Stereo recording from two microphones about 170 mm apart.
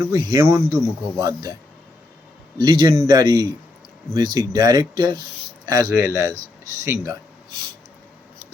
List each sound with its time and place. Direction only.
0.0 s speech: 20° right (ahead or behind)
2.6 s speech: 25° right (ahead or behind)